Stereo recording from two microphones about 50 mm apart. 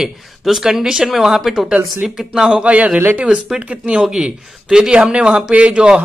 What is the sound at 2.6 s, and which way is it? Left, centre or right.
Speech, right.